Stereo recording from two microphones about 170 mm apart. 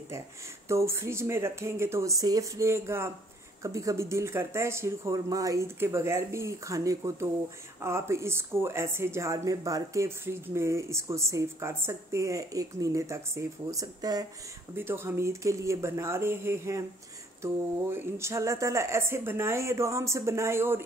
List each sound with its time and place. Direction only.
0.7 s speech: 15° right (ahead or behind)